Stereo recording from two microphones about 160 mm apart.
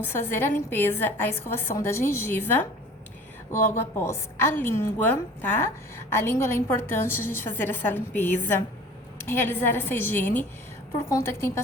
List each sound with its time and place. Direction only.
0.0 s a woman's voice: 15° left (ahead or behind)